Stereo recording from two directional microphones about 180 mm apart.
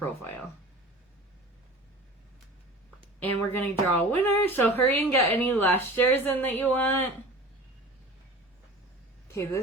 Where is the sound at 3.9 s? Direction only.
10° left (ahead or behind).